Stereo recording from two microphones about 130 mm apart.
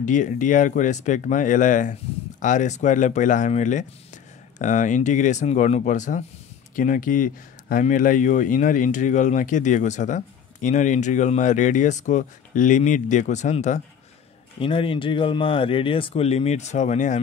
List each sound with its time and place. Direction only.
0.0 s speech: 80° left
2.4 s speech: 70° left (ahead or behind)
6.7 s speech: 90° left; by 13.8 s 65° left (ahead or behind)
14.6 s speech: 45° left (ahead or behind); by 17.2 s 65° left (ahead or behind)